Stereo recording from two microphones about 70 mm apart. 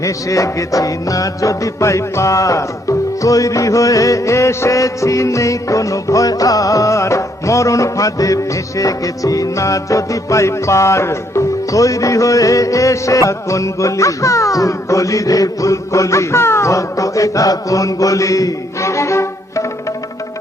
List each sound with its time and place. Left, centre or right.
0.0 s music: left